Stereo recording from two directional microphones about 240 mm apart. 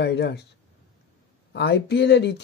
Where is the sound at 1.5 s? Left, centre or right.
Left.